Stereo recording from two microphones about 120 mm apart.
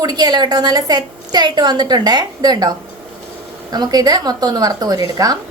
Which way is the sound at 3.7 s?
35° right (ahead or behind).